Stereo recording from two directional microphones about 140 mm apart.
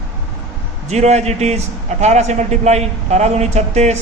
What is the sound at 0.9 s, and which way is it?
A man's voice, 55° right (ahead or behind).